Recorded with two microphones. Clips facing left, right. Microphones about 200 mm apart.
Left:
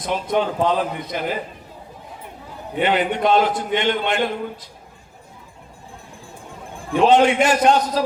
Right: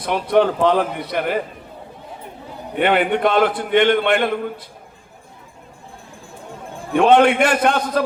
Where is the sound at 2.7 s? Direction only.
55° right (ahead or behind).